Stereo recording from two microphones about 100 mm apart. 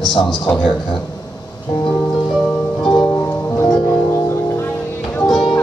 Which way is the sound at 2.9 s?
40° left (ahead or behind).